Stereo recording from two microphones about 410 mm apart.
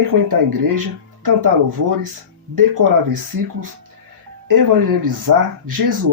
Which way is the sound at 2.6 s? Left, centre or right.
Right.